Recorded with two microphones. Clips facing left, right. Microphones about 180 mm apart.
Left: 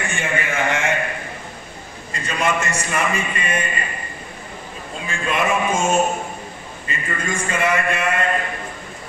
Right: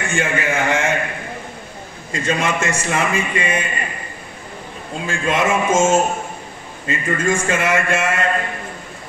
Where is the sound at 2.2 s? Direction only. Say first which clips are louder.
Right 2 dB; 90° right.